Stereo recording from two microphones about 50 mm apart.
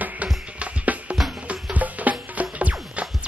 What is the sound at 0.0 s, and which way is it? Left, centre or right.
Music, right.